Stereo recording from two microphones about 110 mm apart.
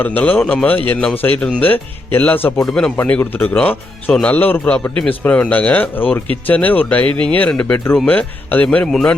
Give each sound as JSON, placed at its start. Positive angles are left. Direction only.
{"t": 0.0, "sound": "speech", "side_deg": 15}